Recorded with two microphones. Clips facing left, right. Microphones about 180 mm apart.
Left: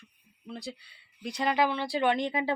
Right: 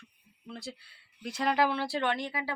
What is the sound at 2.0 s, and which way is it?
Speech, 15° left (ahead or behind).